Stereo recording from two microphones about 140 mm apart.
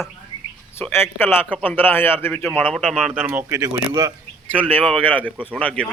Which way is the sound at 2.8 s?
5° right (ahead or behind).